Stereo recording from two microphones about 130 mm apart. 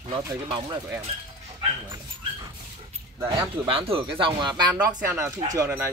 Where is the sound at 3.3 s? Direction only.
45° right (ahead or behind).